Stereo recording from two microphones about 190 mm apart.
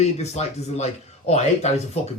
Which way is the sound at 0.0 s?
35° left (ahead or behind).